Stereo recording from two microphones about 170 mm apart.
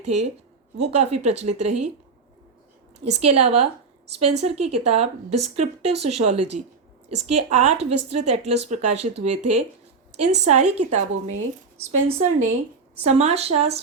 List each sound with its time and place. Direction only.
0.0 s a woman's voice: 40° right (ahead or behind)
3.0 s a woman's voice: 40° right (ahead or behind)